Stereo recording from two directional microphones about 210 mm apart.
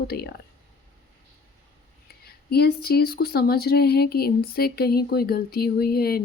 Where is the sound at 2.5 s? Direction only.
50° left (ahead or behind).